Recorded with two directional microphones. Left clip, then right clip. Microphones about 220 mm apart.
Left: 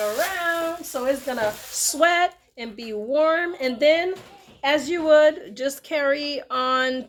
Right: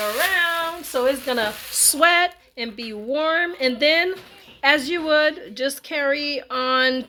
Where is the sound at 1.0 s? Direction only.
50° right (ahead or behind).